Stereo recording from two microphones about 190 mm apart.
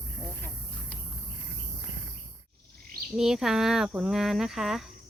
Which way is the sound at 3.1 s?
Centre (ahead or behind).